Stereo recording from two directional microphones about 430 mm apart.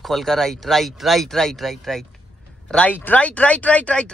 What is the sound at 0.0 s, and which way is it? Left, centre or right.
A man's voice, centre.